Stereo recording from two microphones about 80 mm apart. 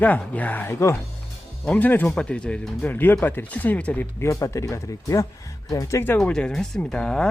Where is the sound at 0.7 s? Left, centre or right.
Left.